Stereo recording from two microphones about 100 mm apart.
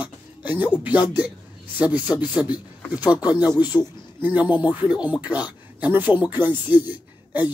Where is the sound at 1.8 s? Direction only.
15° right (ahead or behind).